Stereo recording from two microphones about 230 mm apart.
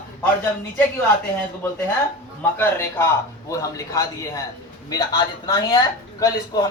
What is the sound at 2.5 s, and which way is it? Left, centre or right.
Speech, centre.